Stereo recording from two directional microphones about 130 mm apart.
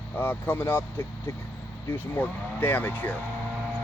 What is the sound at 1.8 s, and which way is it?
Speech, 15° left (ahead or behind).